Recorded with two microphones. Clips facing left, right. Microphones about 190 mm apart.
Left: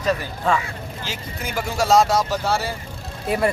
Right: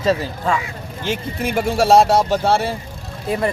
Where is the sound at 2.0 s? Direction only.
30° right (ahead or behind).